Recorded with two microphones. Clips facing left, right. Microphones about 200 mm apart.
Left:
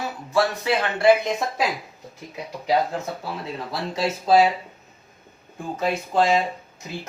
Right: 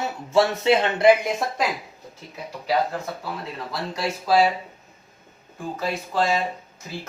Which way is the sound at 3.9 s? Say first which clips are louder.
Left 3 dB; 20° left (ahead or behind).